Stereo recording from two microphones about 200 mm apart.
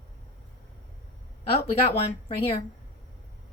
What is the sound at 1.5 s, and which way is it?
Speech, 30° left (ahead or behind).